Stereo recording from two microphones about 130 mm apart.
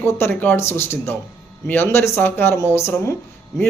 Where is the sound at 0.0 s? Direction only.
15° left (ahead or behind).